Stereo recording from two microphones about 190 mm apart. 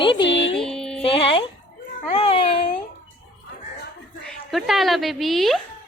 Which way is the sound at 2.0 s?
30° left (ahead or behind).